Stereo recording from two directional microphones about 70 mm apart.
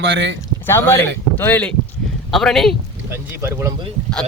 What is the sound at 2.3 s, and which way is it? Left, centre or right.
Speech, centre.